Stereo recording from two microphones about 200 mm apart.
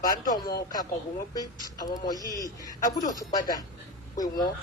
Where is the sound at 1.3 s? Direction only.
20° left (ahead or behind).